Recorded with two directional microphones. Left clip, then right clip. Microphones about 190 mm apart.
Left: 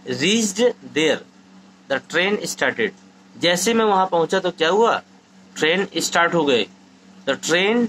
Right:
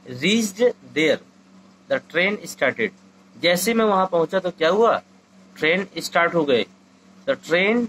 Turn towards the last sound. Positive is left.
turn(degrees=20)  # may be behind; listen again after turning